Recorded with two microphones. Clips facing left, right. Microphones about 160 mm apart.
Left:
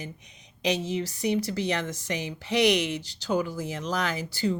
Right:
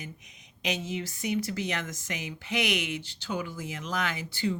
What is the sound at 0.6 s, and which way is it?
A woman's voice, 35° left (ahead or behind).